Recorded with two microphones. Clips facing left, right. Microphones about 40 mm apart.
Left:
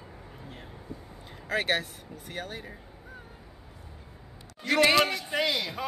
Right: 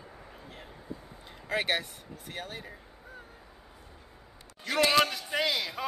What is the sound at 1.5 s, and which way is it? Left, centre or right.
Speech, centre.